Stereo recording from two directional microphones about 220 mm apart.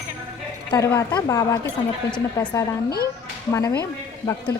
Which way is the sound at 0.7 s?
15° left (ahead or behind).